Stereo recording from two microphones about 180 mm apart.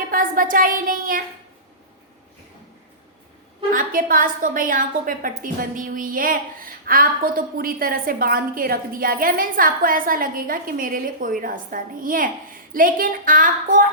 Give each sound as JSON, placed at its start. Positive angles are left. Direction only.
{"t": 0.1, "sound": "a woman's voice", "side_deg": -50}
{"t": 3.7, "sound": "a woman's voice", "side_deg": -50}